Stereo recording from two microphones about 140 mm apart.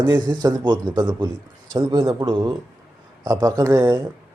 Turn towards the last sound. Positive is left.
turn(degrees=-20)  # may be behind; listen again after turning